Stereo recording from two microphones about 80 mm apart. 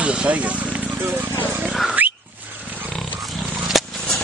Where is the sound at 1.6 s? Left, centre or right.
Centre.